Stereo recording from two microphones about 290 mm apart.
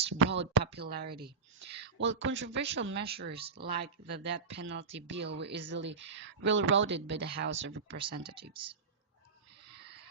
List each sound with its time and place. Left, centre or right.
0.2 s speech: right
8.0 s speech: centre